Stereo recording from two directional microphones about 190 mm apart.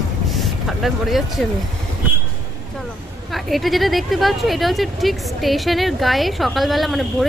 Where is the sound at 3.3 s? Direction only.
Centre (ahead or behind).